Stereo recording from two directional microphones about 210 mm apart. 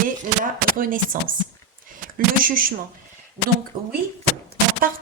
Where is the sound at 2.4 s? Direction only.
40° right (ahead or behind).